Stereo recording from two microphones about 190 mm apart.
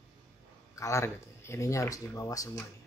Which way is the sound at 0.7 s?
15° left (ahead or behind).